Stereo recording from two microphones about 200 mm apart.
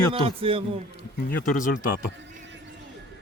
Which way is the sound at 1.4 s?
45° left (ahead or behind).